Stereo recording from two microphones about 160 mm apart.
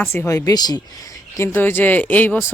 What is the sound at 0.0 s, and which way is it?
Speech, 15° left (ahead or behind).